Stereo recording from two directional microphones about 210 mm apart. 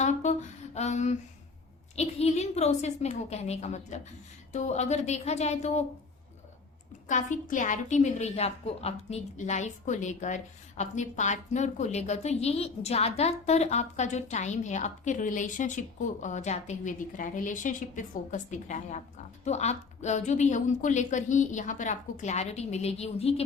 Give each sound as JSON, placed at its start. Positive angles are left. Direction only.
{"t": 0.0, "sound": "a sound", "side_deg": 35}
{"t": 2.0, "sound": "a woman's voice", "side_deg": 30}
{"t": 7.1, "sound": "a woman's voice", "side_deg": 35}